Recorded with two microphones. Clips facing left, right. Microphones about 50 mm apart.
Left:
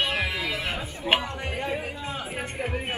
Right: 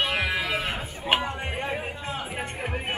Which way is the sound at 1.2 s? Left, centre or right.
Centre.